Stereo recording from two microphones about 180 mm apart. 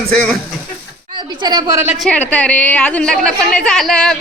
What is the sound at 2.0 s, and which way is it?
A woman's voice, 5° left (ahead or behind).